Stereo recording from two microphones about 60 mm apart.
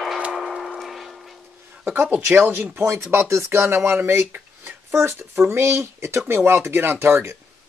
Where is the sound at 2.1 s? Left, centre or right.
Right.